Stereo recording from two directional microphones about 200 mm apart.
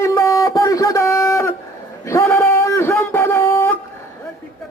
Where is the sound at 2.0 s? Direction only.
10° left (ahead or behind).